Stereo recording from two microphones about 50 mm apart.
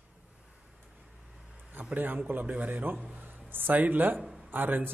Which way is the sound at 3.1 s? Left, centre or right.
Right.